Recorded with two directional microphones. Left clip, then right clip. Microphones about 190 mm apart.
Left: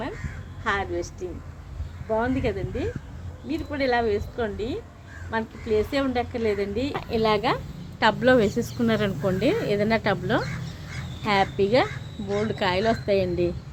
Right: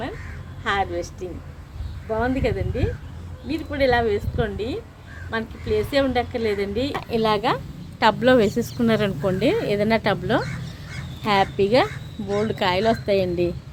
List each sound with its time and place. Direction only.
0.6 s a woman's voice: 5° right (ahead or behind)
6.9 s speech: 15° right (ahead or behind)